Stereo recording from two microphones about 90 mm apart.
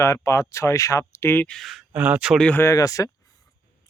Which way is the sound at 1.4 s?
5° left (ahead or behind).